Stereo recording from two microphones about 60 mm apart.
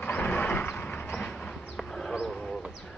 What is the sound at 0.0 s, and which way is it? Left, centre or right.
Vehicle, left.